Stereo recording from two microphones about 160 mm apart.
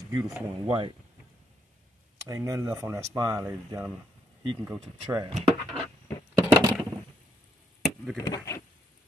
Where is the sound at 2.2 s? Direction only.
20° right (ahead or behind).